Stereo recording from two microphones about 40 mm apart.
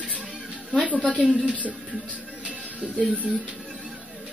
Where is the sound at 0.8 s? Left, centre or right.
Right.